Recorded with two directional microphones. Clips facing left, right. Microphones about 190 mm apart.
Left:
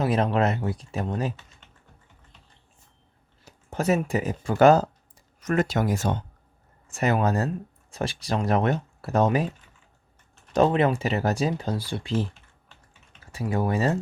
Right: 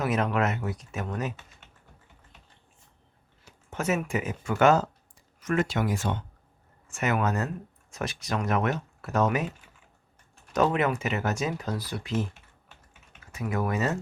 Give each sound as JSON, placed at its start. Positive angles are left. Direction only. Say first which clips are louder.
{"t": 0.0, "sound": "speech", "louder": "left 3 dB", "side_deg": 30}
{"t": 3.4, "sound": "speech", "louder": "left 5 dB", "side_deg": 35}
{"t": 10.5, "sound": "speech", "louder": "left 4 dB", "side_deg": 30}
{"t": 13.3, "sound": "speech", "louder": "left 3 dB", "side_deg": 30}